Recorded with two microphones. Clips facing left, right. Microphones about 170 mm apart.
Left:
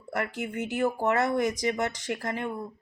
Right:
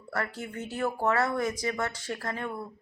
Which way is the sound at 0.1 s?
15° left (ahead or behind).